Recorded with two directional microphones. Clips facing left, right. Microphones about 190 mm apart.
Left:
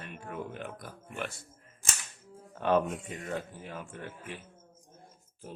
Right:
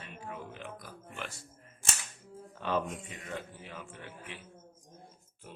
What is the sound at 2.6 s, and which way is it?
A man's voice, 55° left (ahead or behind).